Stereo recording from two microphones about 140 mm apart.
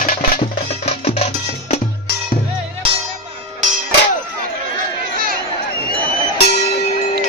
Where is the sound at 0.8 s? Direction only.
50° left (ahead or behind).